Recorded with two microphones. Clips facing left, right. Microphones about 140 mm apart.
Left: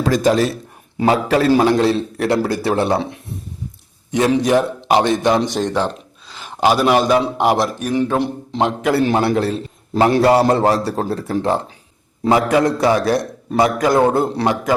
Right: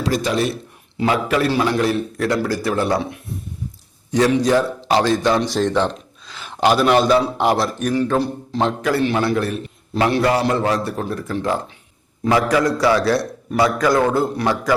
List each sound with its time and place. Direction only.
0.2 s a man's voice: 40° left (ahead or behind)
2.1 s a man's voice: 25° left (ahead or behind)